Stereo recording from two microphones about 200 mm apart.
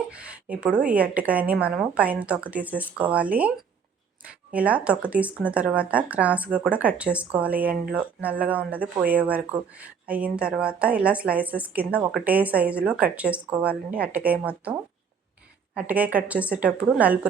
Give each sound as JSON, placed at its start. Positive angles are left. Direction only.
{"t": 0.2, "sound": "speech", "side_deg": -5}
{"t": 4.5, "sound": "speech", "side_deg": -5}